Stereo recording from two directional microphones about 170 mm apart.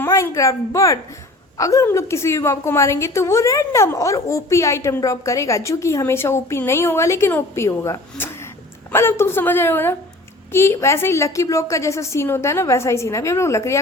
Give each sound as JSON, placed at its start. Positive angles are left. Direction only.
{"t": 0.0, "sound": "a woman's voice", "side_deg": 15}